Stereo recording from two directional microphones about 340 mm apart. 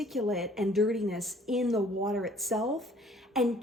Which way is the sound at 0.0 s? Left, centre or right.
Centre.